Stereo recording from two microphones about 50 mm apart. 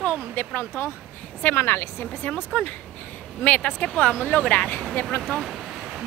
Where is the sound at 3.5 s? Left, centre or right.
Left.